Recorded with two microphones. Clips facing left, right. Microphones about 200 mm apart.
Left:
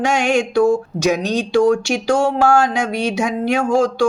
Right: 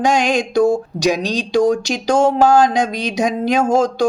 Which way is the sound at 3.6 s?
40° right (ahead or behind).